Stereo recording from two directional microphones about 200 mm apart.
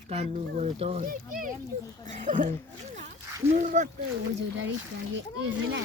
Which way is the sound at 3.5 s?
40° right (ahead or behind).